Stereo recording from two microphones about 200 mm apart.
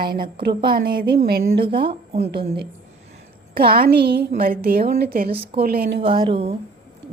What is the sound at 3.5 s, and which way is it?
A woman's voice, 50° right (ahead or behind).